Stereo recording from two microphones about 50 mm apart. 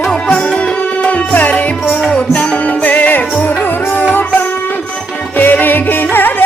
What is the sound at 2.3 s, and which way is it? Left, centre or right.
Music, left.